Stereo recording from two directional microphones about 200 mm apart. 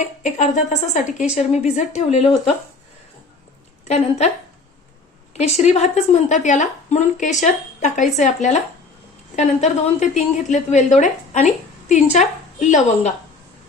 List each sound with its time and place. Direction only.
0.2 s a woman's voice: 35° left (ahead or behind)
3.8 s a woman's voice: 35° left (ahead or behind)
5.3 s a woman's voice: 35° left (ahead or behind)
12.5 s a woman's voice: 35° left (ahead or behind)